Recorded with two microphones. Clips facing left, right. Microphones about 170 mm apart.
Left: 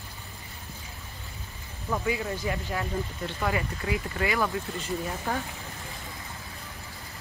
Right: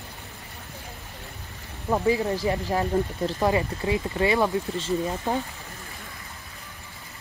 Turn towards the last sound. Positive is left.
turn(degrees=-25)  # may be behind; listen again after turning